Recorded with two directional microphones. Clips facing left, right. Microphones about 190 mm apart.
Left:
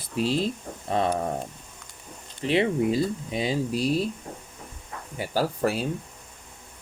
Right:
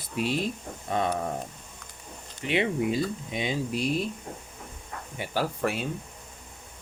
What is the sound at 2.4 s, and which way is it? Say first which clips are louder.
Speech: left 4 dB; 30° left (ahead or behind).